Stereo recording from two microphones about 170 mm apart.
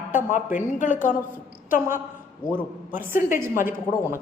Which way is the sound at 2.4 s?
55° left (ahead or behind).